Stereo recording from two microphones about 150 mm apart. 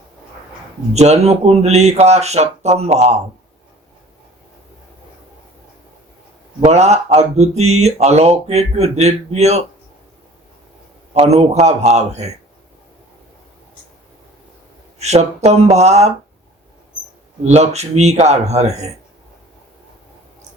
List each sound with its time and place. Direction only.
0.9 s speech: 45° right (ahead or behind)
6.7 s speech: 45° right (ahead or behind)
11.1 s speech: 45° right (ahead or behind)
14.9 s speech: 45° right (ahead or behind)
17.4 s speech: 45° right (ahead or behind)